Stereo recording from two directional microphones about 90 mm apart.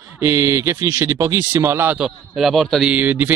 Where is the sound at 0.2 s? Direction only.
30° right (ahead or behind).